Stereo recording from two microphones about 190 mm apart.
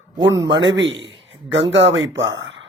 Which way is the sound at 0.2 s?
75° right (ahead or behind).